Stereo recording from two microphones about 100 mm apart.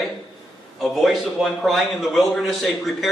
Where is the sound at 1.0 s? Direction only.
Centre (ahead or behind).